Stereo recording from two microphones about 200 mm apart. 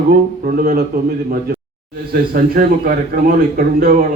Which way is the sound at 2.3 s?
45° right (ahead or behind).